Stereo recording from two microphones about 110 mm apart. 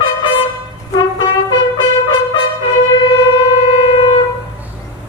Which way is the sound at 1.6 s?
45° left (ahead or behind).